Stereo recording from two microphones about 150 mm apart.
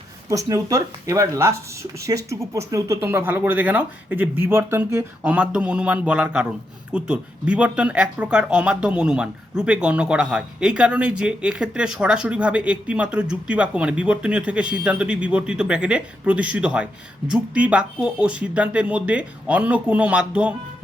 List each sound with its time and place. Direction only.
0.3 s speech: 20° right (ahead or behind)